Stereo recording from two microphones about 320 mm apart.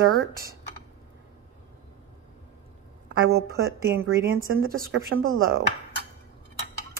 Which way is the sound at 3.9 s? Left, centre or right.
Right.